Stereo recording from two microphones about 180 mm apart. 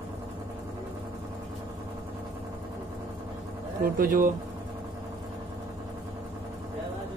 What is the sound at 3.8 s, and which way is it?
Speech, 50° right (ahead or behind).